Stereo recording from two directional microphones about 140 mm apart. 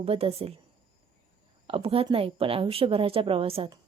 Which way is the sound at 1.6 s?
40° right (ahead or behind).